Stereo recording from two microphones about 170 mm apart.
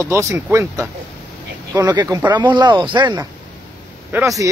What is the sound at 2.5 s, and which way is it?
Speech, 25° right (ahead or behind).